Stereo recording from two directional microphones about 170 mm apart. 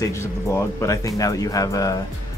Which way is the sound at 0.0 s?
15° left (ahead or behind).